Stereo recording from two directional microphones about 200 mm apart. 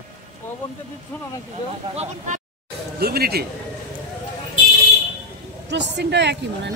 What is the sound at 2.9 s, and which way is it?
Speech, 50° right (ahead or behind).